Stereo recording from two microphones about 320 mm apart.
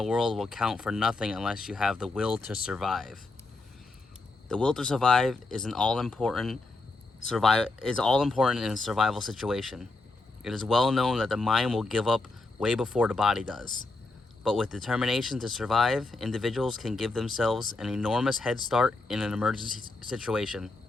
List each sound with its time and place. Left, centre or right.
0.0 s speech: centre
4.4 s speech: centre